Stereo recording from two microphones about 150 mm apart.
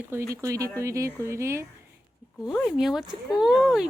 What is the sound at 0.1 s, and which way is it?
Speech, 20° right (ahead or behind).